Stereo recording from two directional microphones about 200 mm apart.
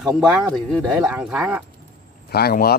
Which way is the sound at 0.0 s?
Centre (ahead or behind).